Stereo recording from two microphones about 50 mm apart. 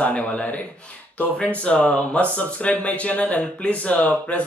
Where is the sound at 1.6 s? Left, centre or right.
Left.